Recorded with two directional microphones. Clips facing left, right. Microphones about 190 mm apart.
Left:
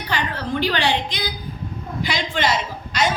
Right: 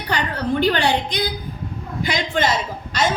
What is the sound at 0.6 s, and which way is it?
A woman's voice, 50° right (ahead or behind).